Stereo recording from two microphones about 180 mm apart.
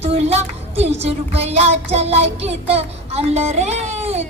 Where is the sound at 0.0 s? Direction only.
35° right (ahead or behind).